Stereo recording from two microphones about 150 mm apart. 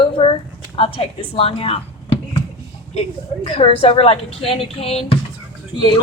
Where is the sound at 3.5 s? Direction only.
40° left (ahead or behind).